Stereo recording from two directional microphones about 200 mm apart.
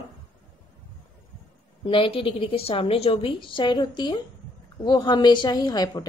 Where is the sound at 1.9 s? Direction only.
25° left (ahead or behind).